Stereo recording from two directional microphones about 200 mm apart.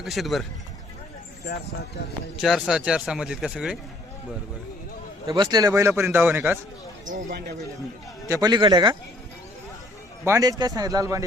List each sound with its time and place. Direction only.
0.0 s speech: centre (ahead or behind)
2.4 s speech: centre (ahead or behind)
5.2 s a man's voice: 20° right (ahead or behind)
7.0 s speech: 65° right (ahead or behind)
8.3 s speech: 20° right (ahead or behind)
10.2 s a man's voice: 15° right (ahead or behind)